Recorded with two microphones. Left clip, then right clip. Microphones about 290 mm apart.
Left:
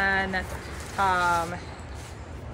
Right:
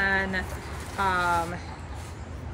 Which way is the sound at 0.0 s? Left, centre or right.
Centre.